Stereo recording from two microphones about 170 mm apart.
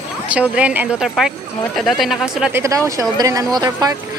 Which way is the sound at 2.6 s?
20° right (ahead or behind).